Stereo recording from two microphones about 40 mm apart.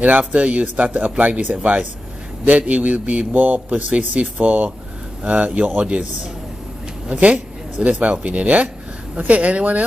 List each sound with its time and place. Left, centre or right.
0.2 s speech: right
7.2 s speech: right
8.0 s speech: right